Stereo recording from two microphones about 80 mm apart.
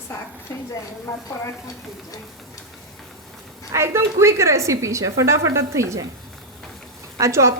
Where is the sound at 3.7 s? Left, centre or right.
Right.